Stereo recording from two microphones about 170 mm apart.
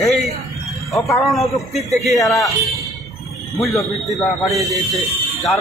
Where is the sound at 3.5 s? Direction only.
Centre (ahead or behind).